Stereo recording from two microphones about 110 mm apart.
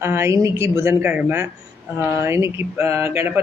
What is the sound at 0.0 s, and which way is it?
Speech, 25° right (ahead or behind).